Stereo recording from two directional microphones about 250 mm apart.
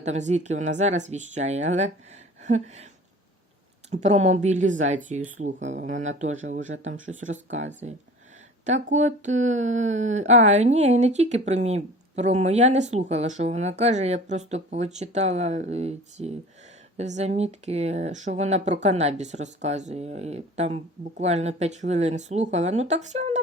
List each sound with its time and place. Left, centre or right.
0.0 s speech: right
2.4 s a sound: right
3.8 s speech: right